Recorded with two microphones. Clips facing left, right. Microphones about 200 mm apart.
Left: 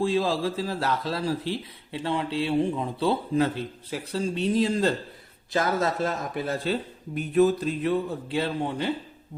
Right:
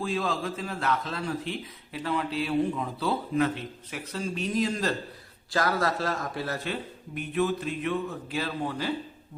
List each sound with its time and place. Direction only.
0.0 s a man's voice: 30° left (ahead or behind)